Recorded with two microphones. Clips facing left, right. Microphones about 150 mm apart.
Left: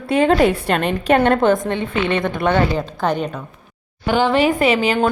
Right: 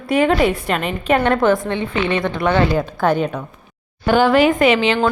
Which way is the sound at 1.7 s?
50° left (ahead or behind).